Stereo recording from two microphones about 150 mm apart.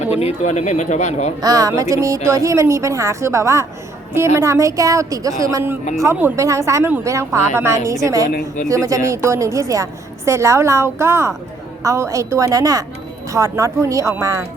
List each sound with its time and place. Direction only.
0.2 s speech: 45° left (ahead or behind)
1.4 s a woman's voice: 25° right (ahead or behind)